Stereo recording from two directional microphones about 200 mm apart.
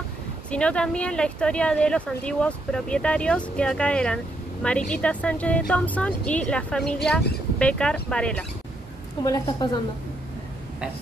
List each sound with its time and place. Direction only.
0.5 s speech: 5° left (ahead or behind)
9.2 s a woman's voice: 15° left (ahead or behind)